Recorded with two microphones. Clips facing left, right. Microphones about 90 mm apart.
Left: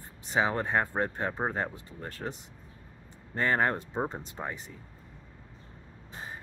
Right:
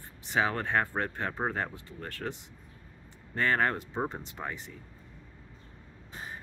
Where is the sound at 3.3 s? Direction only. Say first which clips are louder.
Left 1 dB; 25° left (ahead or behind).